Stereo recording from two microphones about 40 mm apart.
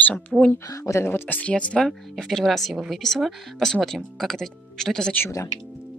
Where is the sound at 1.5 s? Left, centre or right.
Left.